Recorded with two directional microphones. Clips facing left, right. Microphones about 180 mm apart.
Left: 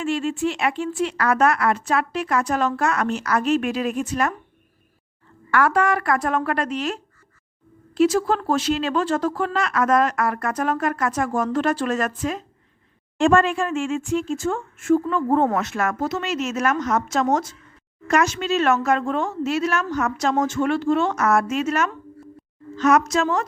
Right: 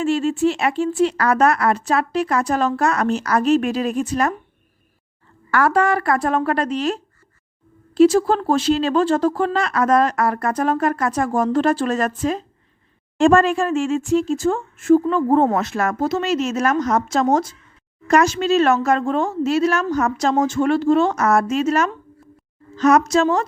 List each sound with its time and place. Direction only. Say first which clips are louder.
0.0 s speech: right 5 dB; 35° right (ahead or behind)
5.5 s speech: right 2 dB; 35° right (ahead or behind)